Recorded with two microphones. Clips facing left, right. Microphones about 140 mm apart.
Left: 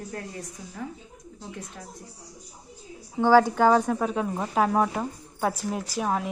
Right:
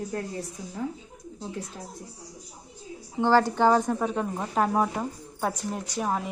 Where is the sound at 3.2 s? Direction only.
10° left (ahead or behind).